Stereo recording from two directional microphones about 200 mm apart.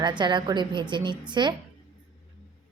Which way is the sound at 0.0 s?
20° right (ahead or behind).